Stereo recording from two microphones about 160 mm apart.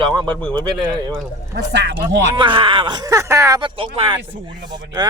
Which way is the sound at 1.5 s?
90° right.